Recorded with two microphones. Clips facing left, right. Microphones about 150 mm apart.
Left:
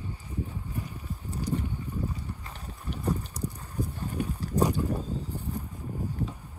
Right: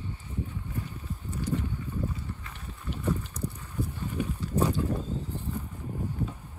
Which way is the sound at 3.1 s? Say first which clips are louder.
Even; 10° left (ahead or behind).